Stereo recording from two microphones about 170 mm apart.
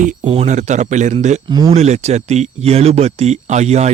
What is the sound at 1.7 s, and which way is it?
Speech, 40° right (ahead or behind).